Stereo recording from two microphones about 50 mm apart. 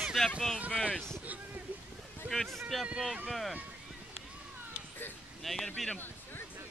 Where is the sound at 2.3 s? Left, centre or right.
Centre.